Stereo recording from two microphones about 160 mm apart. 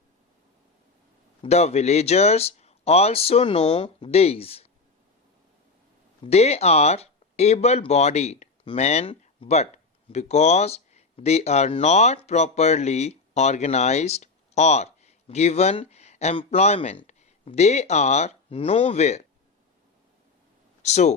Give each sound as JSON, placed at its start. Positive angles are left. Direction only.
{"t": 1.4, "sound": "speech", "side_deg": 40}
{"t": 6.2, "sound": "speech", "side_deg": 40}
{"t": 20.8, "sound": "speech", "side_deg": 45}